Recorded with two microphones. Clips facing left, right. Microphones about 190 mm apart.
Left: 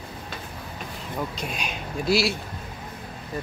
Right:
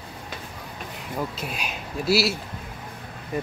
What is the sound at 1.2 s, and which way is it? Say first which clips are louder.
Speech: right 1 dB; 5° right (ahead or behind).